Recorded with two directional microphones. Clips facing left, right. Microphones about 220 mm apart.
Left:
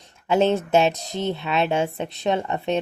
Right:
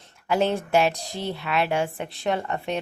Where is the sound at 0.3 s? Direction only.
25° left (ahead or behind).